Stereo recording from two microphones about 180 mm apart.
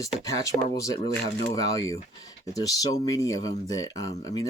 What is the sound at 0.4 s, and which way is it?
Speech, 20° left (ahead or behind).